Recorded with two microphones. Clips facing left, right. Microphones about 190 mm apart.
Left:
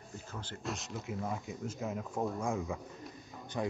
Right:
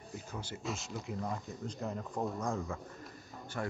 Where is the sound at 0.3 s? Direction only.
10° right (ahead or behind).